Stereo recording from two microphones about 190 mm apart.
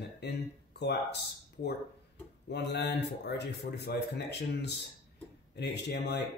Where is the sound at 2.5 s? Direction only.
60° left (ahead or behind).